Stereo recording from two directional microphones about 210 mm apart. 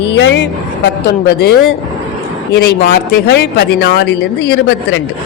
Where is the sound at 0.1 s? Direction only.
60° left (ahead or behind).